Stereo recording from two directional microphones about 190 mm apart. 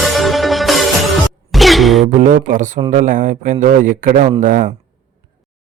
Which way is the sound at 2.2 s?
45° right (ahead or behind).